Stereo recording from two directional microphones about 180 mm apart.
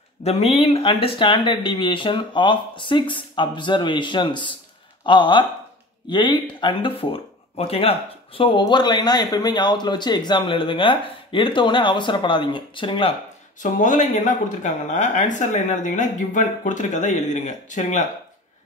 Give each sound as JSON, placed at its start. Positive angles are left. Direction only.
{"t": 0.2, "sound": "speech", "side_deg": 35}
{"t": 13.6, "sound": "speech", "side_deg": 45}